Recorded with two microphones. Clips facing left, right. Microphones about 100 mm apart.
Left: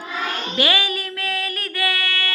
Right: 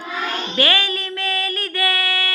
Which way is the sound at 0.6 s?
10° left (ahead or behind).